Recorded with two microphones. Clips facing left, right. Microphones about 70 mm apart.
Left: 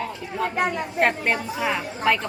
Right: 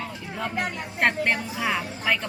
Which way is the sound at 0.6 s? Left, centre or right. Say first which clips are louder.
Left 3 dB; centre.